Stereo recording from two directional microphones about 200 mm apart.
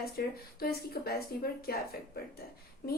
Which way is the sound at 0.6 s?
50° left (ahead or behind).